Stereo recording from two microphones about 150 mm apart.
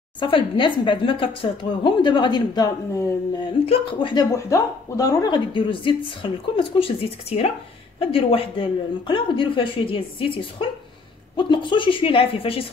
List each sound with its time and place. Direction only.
0.2 s speech: 35° left (ahead or behind)
3.6 s speech: 35° left (ahead or behind)
4.3 s speech: 20° left (ahead or behind); by 12.6 s 40° left (ahead or behind)